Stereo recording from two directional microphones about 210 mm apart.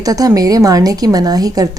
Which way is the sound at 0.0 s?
15° right (ahead or behind).